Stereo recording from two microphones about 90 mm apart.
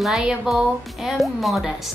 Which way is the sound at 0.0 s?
5° right (ahead or behind).